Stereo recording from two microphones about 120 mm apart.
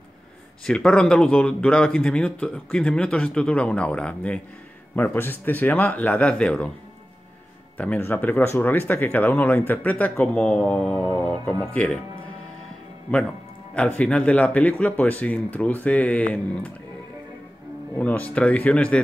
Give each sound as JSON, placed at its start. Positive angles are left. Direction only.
{"t": 0.7, "sound": "speech", "side_deg": 5}
{"t": 7.7, "sound": "speech", "side_deg": 10}
{"t": 11.1, "sound": "speech", "side_deg": 15}
{"t": 13.1, "sound": "speech", "side_deg": 10}
{"t": 17.9, "sound": "speech", "side_deg": 10}